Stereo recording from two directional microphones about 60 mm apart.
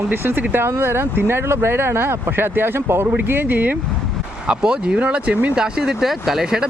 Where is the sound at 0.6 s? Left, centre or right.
Right.